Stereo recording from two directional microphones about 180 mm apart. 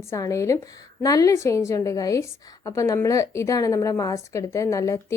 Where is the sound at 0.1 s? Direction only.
15° left (ahead or behind).